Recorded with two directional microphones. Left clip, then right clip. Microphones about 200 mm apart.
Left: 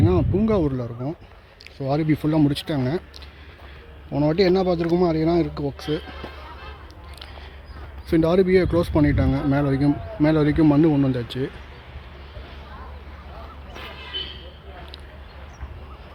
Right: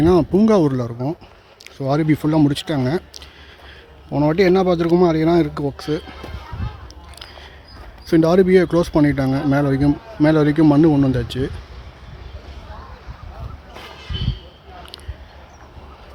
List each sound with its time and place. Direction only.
0.0 s speech: 30° right (ahead or behind)
8.0 s speech: 20° right (ahead or behind)
13.9 s a sound: 65° right (ahead or behind)